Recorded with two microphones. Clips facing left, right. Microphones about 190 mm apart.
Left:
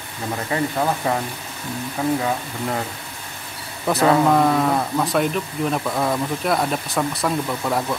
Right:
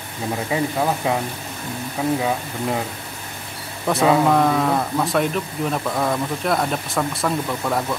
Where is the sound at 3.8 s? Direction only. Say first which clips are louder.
Even; centre (ahead or behind).